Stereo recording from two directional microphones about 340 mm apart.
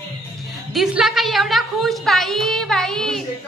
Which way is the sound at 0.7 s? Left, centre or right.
Centre.